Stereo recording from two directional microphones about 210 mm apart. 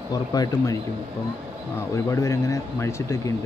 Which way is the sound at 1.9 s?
15° left (ahead or behind).